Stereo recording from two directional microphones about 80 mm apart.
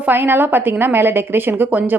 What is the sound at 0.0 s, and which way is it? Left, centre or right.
Speech, right.